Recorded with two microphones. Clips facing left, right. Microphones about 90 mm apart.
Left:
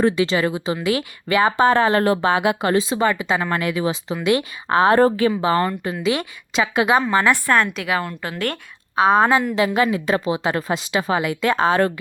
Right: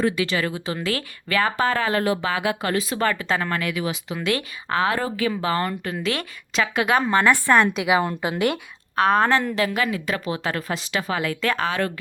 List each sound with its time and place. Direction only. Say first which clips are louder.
0.0 s speech: left 4 dB; 25° left (ahead or behind)
1.9 s speech: left 5 dB; 40° left (ahead or behind); by 3.0 s 25° left (ahead or behind)
3.0 s a woman's voice: left 3 dB; 15° left (ahead or behind)
3.5 s speech: left 4 dB; 25° left (ahead or behind)
4.3 s speech: left 6 dB; 20° left (ahead or behind)
4.8 s a woman's voice: left 8 dB; 35° left (ahead or behind)
5.9 s a woman's voice: left 4 dB; 15° left (ahead or behind)
7.4 s a woman's voice: right 1 dB; 10° right (ahead or behind)
9.0 s a woman's voice: left 3 dB; 5° left (ahead or behind)
9.6 s speech: left 5 dB; 25° left (ahead or behind)